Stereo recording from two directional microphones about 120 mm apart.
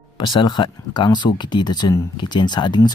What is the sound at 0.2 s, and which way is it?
Speech, 40° left (ahead or behind).